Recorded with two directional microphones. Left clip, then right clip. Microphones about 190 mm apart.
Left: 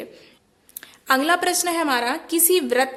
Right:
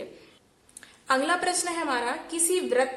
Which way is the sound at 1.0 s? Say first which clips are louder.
Left 5 dB; 35° left (ahead or behind).